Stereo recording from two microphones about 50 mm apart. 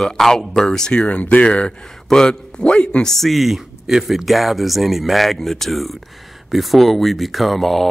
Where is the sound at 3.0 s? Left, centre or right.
Centre.